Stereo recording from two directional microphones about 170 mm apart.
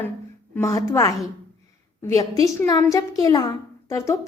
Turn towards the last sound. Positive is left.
turn(degrees=20)  # may be behind; listen again after turning